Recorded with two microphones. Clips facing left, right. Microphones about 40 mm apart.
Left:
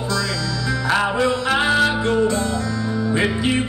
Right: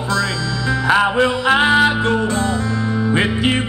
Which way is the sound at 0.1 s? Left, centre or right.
Right.